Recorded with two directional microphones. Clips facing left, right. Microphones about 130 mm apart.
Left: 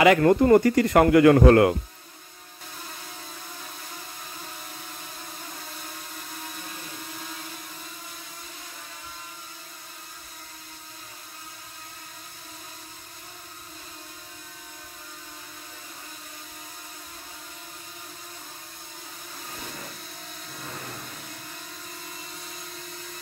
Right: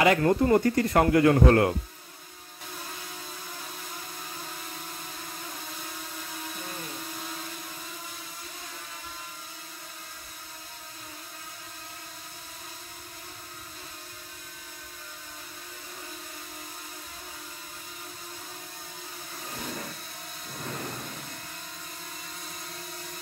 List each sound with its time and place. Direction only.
0.0 s speech: 85° left